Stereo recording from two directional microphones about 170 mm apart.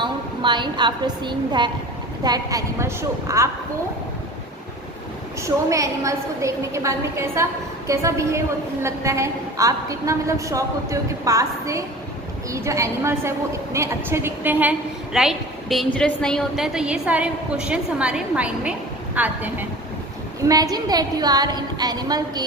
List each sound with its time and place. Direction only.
0.0 s a woman's voice: 25° right (ahead or behind)
5.4 s a woman's voice: 20° right (ahead or behind)
20.4 s a woman's voice: 20° right (ahead or behind)